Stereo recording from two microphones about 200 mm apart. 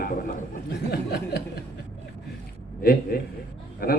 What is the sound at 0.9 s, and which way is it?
Speech, 50° left (ahead or behind).